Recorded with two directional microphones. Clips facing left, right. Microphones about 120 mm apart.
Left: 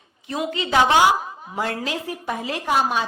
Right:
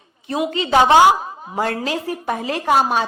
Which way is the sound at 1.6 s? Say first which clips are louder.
Right 4 dB; 40° right (ahead or behind).